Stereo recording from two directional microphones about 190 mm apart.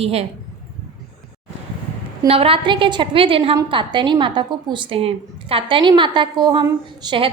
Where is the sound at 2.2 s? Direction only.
30° right (ahead or behind).